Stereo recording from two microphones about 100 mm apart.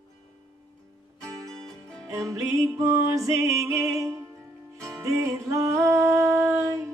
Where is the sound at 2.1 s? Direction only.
30° right (ahead or behind).